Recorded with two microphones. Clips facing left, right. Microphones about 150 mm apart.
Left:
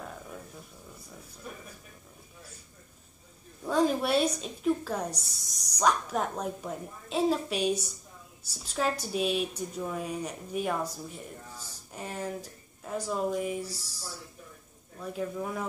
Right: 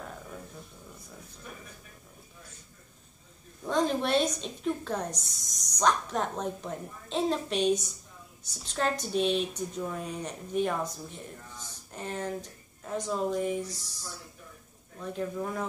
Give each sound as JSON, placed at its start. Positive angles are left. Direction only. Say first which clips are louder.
{"t": 3.6, "sound": "a woman's voice", "louder": "left 1 dB", "side_deg": 5}
{"t": 11.9, "sound": "speech", "louder": "right 1 dB", "side_deg": 5}
{"t": 15.0, "sound": "a woman's voice", "louder": "even", "side_deg": 5}